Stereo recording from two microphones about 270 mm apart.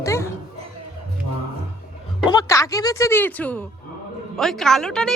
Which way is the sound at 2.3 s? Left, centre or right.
Centre.